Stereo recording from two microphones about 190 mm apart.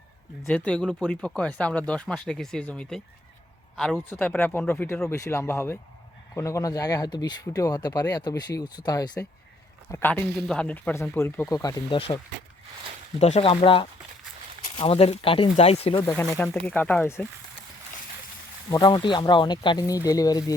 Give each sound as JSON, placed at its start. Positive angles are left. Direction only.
{"t": 0.4, "sound": "speech", "side_deg": 5}
{"t": 9.9, "sound": "speech", "side_deg": 10}
{"t": 16.5, "sound": "speech", "side_deg": 5}
{"t": 18.7, "sound": "speech", "side_deg": 20}